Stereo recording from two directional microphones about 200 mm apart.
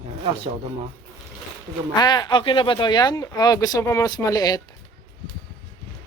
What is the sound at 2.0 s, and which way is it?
Speech, 20° left (ahead or behind).